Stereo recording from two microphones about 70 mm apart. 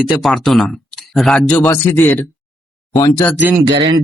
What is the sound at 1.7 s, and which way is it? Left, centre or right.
Speech, left.